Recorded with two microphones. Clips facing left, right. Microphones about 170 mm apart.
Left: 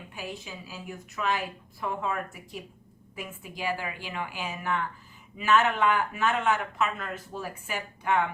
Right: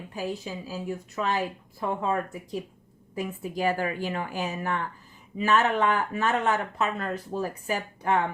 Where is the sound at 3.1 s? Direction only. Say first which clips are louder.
Right 9 dB; 35° right (ahead or behind).